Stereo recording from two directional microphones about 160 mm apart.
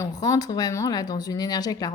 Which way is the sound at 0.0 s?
25° left (ahead or behind).